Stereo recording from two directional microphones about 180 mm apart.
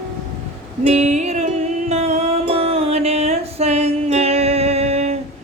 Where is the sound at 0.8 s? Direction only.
40° right (ahead or behind).